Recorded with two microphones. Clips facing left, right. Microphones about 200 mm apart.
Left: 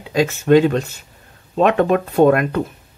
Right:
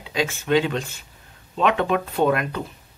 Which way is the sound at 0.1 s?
45° left (ahead or behind).